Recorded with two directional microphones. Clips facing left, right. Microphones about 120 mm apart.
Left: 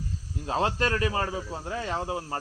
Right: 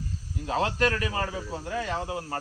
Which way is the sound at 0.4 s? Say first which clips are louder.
Right 1 dB; 30° left (ahead or behind).